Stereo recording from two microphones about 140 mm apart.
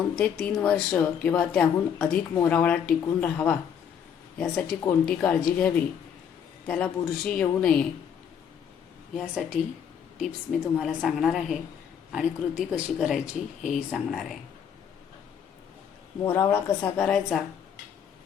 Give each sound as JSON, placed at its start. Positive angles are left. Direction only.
{"t": 0.2, "sound": "a woman's voice", "side_deg": 10}
{"t": 10.2, "sound": "speech", "side_deg": 0}
{"t": 16.2, "sound": "a woman's voice", "side_deg": 15}